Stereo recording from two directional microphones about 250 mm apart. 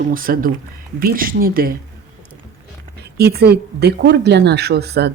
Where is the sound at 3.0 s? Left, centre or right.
Right.